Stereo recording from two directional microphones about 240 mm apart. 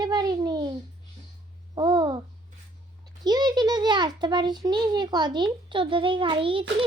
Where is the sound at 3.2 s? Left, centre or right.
Centre.